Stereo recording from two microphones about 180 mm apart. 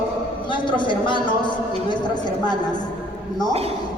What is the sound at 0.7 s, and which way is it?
Speech, 25° left (ahead or behind).